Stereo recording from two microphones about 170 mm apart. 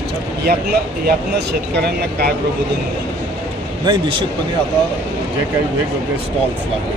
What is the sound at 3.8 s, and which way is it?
Speech, 30° right (ahead or behind).